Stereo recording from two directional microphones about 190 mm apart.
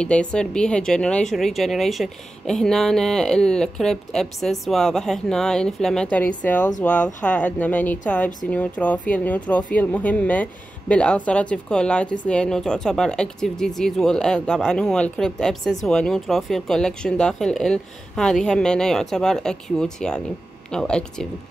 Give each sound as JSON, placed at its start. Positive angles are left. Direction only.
{"t": 0.0, "sound": "speech", "side_deg": 5}